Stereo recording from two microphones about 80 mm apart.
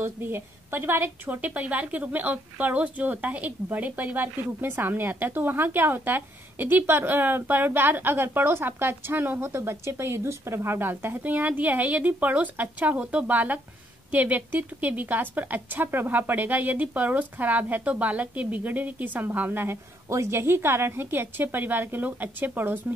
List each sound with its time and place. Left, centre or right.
0.0 s a woman's voice: right